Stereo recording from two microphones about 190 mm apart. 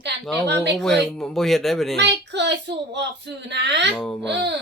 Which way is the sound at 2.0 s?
65° right (ahead or behind).